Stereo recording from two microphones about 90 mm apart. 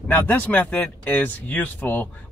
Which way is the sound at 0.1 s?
20° left (ahead or behind).